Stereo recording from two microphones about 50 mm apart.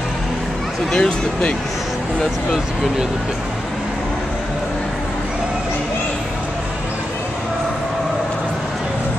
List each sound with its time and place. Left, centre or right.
0.9 s speech: left